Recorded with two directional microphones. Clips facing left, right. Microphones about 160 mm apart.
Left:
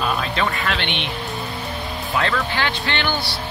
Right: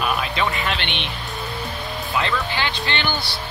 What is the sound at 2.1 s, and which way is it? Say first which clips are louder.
Speech: left 2 dB; 10° right (ahead or behind).